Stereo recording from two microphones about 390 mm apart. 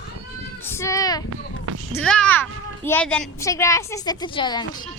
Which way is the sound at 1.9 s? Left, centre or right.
Centre.